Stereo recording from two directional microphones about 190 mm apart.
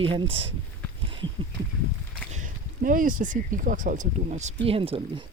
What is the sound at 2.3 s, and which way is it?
Speech, 45° right (ahead or behind).